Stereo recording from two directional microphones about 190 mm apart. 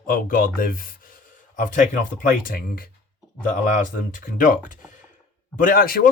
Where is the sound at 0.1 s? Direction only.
45° left (ahead or behind).